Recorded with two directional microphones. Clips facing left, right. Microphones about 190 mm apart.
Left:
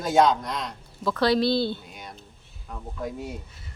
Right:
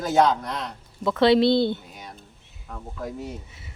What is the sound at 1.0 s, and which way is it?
Speech, 25° right (ahead or behind).